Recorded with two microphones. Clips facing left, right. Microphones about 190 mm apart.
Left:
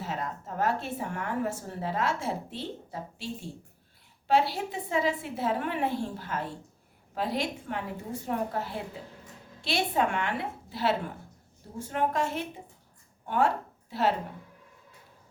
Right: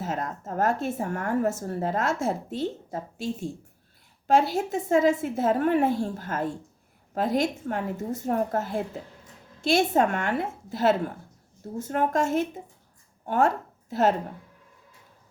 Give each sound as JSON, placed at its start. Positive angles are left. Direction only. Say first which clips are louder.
{"t": 0.0, "sound": "speech", "louder": "right 4 dB", "side_deg": -45}